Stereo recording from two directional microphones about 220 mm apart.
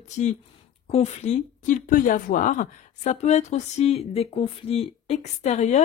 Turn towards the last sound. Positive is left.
turn(degrees=30)  # may be behind; listen again after turning